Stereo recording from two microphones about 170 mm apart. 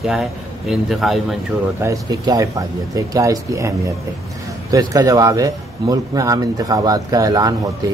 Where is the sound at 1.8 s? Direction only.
20° right (ahead or behind).